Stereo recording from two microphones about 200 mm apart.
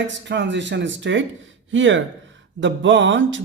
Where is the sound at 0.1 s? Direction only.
65° right (ahead or behind).